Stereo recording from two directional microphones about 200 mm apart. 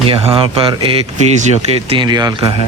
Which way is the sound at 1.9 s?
20° right (ahead or behind).